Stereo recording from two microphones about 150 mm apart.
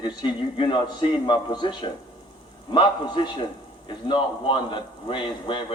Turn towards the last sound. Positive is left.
turn(degrees=35)  # may be behind; listen again after turning